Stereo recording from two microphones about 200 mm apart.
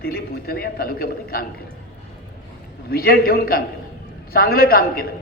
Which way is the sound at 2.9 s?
50° left (ahead or behind).